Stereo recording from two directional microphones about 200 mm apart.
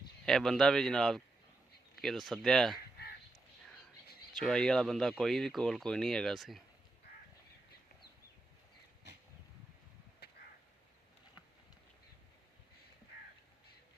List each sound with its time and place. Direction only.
0.3 s speech: centre (ahead or behind)
4.4 s speech: 5° left (ahead or behind)
10.2 s a sound: 55° left (ahead or behind)